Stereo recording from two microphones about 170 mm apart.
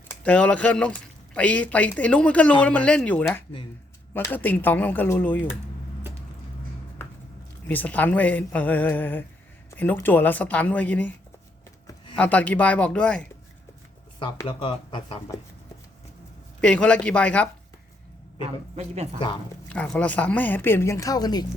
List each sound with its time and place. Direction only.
0.1 s speech: 5° left (ahead or behind)
7.7 s speech: 10° left (ahead or behind)
12.1 s speech: 10° left (ahead or behind)
14.2 s speech: 25° left (ahead or behind)
16.6 s speech: 5° left (ahead or behind)
19.6 s speech: 5° left (ahead or behind); by 21.4 s 25° left (ahead or behind)